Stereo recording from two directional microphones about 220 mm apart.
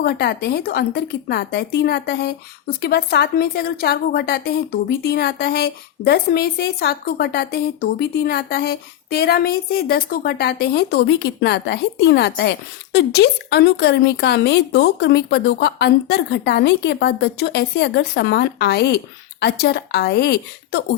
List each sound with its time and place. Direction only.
0.0 s speech: 45° left (ahead or behind)